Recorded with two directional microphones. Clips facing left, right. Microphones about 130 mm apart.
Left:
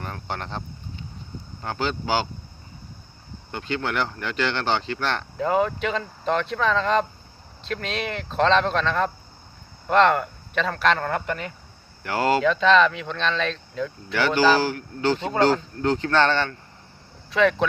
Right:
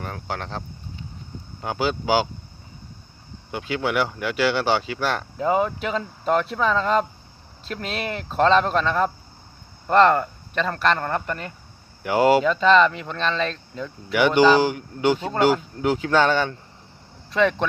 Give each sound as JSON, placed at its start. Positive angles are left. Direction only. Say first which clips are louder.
{"t": 0.0, "sound": "speech", "louder": "right 1 dB", "side_deg": 0}
{"t": 1.6, "sound": "speech", "louder": "right 3 dB", "side_deg": -10}
{"t": 3.5, "sound": "speech", "louder": "right 3 dB", "side_deg": -10}
{"t": 12.0, "sound": "speech", "louder": "right 3 dB", "side_deg": -15}
{"t": 14.2, "sound": "speech", "louder": "right 3 dB", "side_deg": -15}
{"t": 17.3, "sound": "speech", "louder": "left 1 dB", "side_deg": 0}